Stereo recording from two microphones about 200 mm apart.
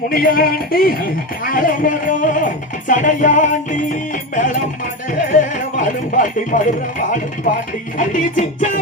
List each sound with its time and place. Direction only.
0.1 s speech: 50° left (ahead or behind)
5.1 s music: 40° left (ahead or behind)